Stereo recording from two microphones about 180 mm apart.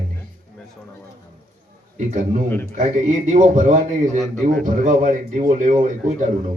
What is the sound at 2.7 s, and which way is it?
Speech, 45° right (ahead or behind).